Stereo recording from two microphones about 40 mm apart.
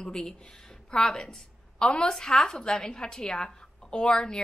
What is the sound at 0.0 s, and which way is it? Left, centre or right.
A woman's voice, centre.